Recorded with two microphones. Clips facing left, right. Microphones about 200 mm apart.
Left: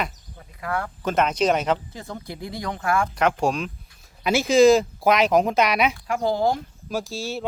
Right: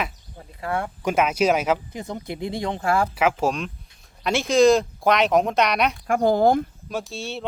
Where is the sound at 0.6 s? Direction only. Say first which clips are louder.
Right 1 dB; 25° right (ahead or behind).